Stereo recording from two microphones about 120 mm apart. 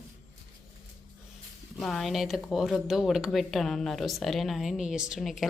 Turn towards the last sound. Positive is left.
turn(degrees=0)  # may be behind; listen again after turning